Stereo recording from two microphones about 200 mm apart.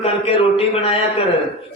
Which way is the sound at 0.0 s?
30° left (ahead or behind).